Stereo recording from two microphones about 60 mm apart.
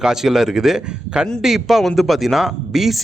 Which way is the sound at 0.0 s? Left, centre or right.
Centre.